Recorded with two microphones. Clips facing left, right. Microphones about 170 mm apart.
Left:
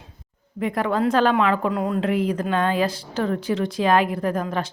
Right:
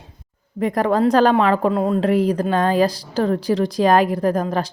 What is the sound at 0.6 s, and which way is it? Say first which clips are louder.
Speech: right 4 dB; 40° right (ahead or behind).